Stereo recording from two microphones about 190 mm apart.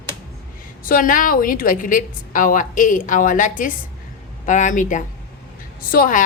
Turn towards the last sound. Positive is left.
turn(degrees=50)  # may be behind; listen again after turning